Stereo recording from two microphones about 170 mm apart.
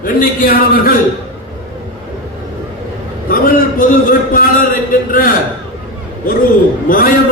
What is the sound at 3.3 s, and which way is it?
A man's voice, 55° left (ahead or behind).